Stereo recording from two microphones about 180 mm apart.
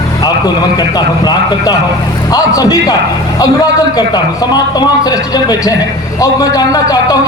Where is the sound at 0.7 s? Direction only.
20° left (ahead or behind).